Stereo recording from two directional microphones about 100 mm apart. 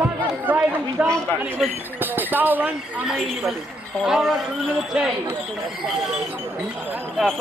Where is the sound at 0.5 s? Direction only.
15° right (ahead or behind).